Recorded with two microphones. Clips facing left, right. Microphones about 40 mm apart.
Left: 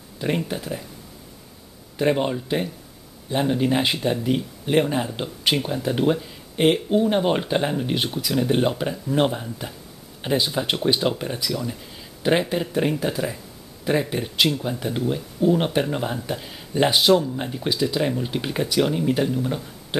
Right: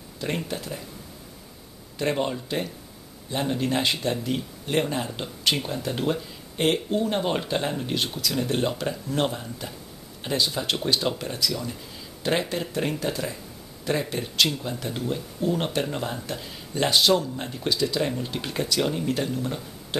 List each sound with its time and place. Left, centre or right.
0.5 s speech: centre
2.0 s speech: centre